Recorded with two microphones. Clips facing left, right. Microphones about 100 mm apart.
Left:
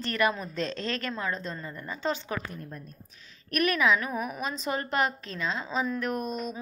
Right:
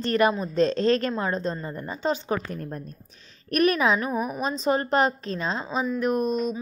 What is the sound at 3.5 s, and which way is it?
A woman's voice, 30° right (ahead or behind).